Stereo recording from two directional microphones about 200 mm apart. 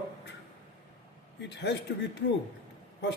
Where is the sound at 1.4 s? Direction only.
60° left (ahead or behind).